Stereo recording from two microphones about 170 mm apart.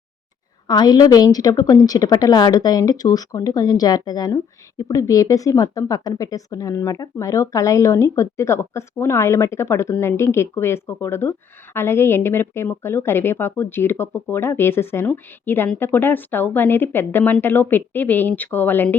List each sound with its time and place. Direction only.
0.7 s a woman's voice: 25° left (ahead or behind)